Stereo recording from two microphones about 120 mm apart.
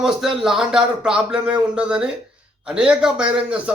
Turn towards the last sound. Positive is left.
turn(degrees=-10)  # may be behind; listen again after turning